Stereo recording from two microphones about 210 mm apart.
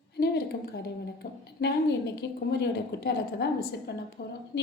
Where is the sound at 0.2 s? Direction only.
50° left (ahead or behind).